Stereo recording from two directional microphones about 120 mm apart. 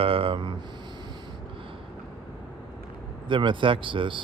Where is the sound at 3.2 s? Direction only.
45° right (ahead or behind).